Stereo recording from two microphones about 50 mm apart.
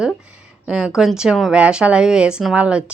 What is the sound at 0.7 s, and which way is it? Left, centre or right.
A woman's voice, centre.